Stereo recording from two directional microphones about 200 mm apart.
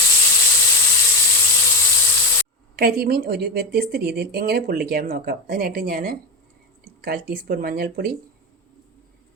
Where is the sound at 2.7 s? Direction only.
50° right (ahead or behind).